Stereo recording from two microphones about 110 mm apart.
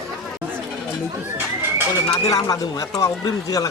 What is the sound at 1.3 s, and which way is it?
Crowd, 20° right (ahead or behind).